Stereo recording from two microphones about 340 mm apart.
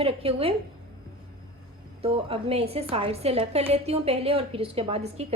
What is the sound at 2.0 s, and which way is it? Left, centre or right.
A woman's voice, centre.